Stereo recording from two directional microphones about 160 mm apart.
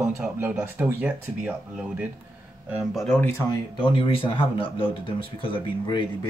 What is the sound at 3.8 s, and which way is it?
Speech, 30° left (ahead or behind).